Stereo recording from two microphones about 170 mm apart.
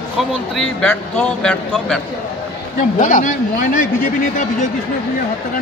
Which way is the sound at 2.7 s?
50° left (ahead or behind).